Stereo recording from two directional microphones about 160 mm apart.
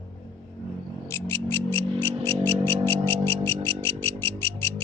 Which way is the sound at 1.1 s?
15° left (ahead or behind).